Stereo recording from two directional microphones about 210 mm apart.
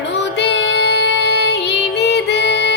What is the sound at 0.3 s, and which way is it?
Music, 55° left (ahead or behind).